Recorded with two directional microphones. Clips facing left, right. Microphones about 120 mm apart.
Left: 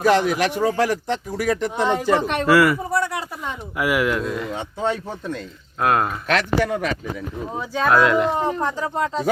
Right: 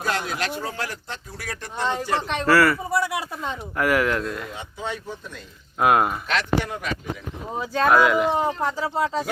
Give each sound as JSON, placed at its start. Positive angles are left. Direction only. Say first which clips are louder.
{"t": 0.0, "sound": "speech", "louder": "left 9 dB", "side_deg": 90}
{"t": 1.7, "sound": "a man's voice", "louder": "left 1 dB", "side_deg": 10}
{"t": 2.9, "sound": "speech", "louder": "left 1 dB", "side_deg": -10}
{"t": 3.8, "sound": "speech", "louder": "left 1 dB", "side_deg": 5}
{"t": 4.8, "sound": "speech", "louder": "left 7 dB", "side_deg": 45}
{"t": 5.8, "sound": "speech", "louder": "right 1 dB", "side_deg": -10}
{"t": 6.3, "sound": "speech", "louder": "left 7 dB", "side_deg": 90}
{"t": 7.7, "sound": "speech", "louder": "left 1 dB", "side_deg": 0}